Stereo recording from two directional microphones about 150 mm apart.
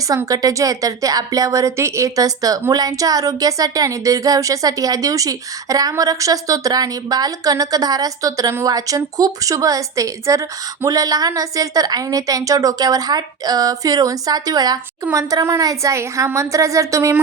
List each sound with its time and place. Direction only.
0.1 s a woman's voice: 25° right (ahead or behind)